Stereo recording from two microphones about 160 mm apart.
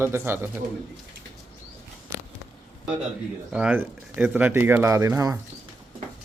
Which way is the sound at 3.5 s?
10° right (ahead or behind).